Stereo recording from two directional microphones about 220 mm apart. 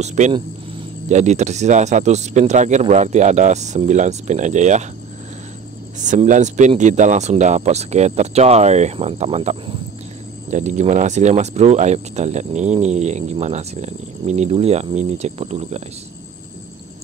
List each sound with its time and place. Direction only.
0.0 s speech: 30° right (ahead or behind)
5.9 s speech: 35° right (ahead or behind)